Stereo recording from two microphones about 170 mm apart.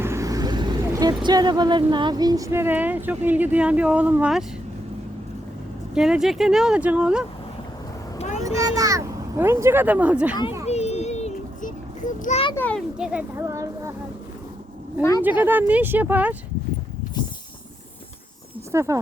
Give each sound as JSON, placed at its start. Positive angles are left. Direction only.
{"t": 0.0, "sound": "speech", "side_deg": -15}
{"t": 5.9, "sound": "speech", "side_deg": -5}
{"t": 8.2, "sound": "vehicle", "side_deg": 40}
{"t": 8.4, "sound": "a child's voice", "side_deg": -20}
{"t": 10.7, "sound": "child singing", "side_deg": 40}
{"t": 12.5, "sound": "a child's voice", "side_deg": 10}
{"t": 13.0, "sound": "speech", "side_deg": -5}
{"t": 13.3, "sound": "speech", "side_deg": -15}
{"t": 15.2, "sound": "speech", "side_deg": -10}
{"t": 17.2, "sound": "a sound", "side_deg": 25}
{"t": 18.7, "sound": "speech", "side_deg": -15}